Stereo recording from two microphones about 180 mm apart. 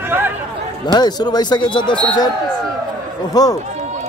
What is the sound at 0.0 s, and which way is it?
Chatter, 10° right (ahead or behind).